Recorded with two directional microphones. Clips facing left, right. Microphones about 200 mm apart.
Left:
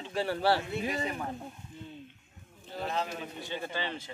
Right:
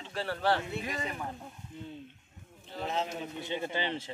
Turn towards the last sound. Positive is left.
turn(degrees=-25)  # may be behind; listen again after turning